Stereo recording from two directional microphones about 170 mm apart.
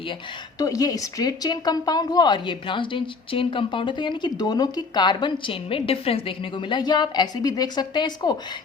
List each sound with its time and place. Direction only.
0.6 s a woman's voice: 20° left (ahead or behind)